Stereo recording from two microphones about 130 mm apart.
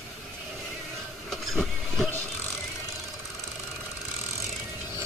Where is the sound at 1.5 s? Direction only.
5° left (ahead or behind).